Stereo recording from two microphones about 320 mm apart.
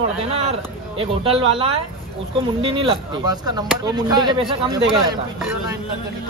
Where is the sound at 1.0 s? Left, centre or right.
Centre.